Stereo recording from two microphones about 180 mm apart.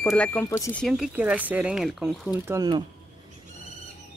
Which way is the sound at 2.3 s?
15° right (ahead or behind).